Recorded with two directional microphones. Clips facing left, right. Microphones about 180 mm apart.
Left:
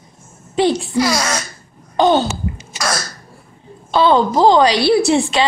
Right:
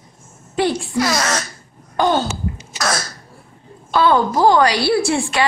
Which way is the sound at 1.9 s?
20° left (ahead or behind).